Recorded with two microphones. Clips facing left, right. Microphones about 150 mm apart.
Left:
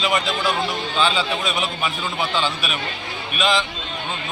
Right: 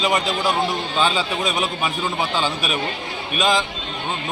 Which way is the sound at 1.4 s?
40° right (ahead or behind).